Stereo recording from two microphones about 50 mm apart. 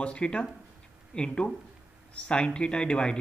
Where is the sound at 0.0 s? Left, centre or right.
Left.